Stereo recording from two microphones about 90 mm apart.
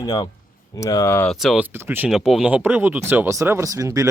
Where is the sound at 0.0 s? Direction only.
50° left (ahead or behind).